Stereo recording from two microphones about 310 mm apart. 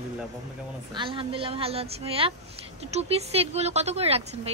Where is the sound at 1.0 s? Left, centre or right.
Centre.